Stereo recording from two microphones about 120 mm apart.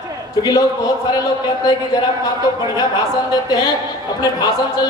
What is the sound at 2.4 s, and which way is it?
Speech, 30° left (ahead or behind).